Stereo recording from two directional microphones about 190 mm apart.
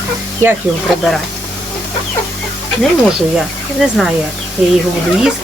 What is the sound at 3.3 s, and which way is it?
Speech, centre (ahead or behind).